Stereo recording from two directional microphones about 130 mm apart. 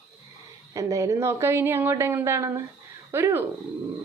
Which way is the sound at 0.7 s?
25° right (ahead or behind).